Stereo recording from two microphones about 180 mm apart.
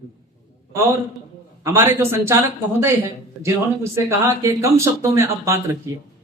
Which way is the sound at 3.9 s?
15° right (ahead or behind).